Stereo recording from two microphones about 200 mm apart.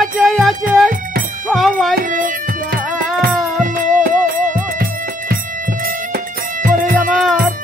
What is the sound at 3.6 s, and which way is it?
Music, 40° right (ahead or behind).